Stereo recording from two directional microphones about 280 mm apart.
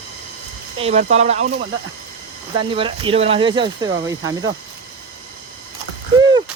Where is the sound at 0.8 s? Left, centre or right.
Right.